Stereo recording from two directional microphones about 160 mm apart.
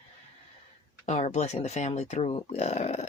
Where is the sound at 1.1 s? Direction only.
45° left (ahead or behind).